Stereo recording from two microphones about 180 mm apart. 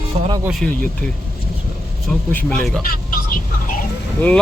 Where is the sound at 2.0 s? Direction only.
5° left (ahead or behind).